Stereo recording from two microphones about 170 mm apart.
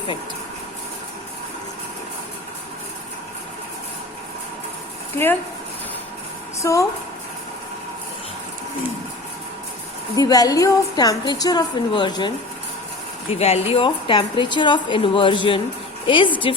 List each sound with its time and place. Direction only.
5.1 s speech: 10° left (ahead or behind)
6.6 s speech: 20° left (ahead or behind)
10.2 s a woman's voice: 20° left (ahead or behind)
13.4 s a woman's voice: 35° left (ahead or behind)